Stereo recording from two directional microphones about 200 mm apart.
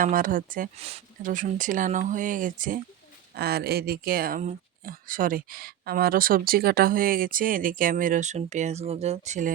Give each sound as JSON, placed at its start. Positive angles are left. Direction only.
{"t": 0.0, "sound": "speech", "side_deg": -45}
{"t": 0.8, "sound": "speech", "side_deg": -30}